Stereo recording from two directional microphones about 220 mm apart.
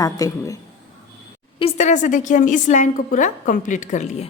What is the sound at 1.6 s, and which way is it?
A woman's voice, 30° left (ahead or behind).